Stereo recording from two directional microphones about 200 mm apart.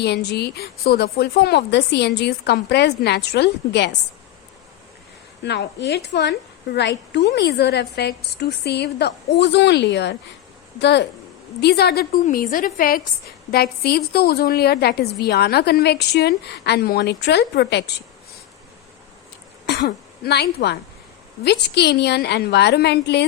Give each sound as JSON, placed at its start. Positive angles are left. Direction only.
{"t": 0.0, "sound": "a woman's voice", "side_deg": 55}
{"t": 5.4, "sound": "a woman's voice", "side_deg": 60}
{"t": 19.6, "sound": "a woman's voice", "side_deg": 55}